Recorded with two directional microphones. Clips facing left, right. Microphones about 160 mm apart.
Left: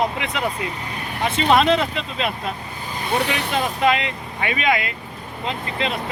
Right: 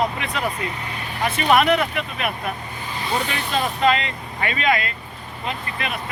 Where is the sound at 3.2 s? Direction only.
75° left (ahead or behind).